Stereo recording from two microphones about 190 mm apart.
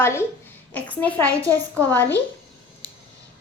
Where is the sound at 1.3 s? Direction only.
15° right (ahead or behind).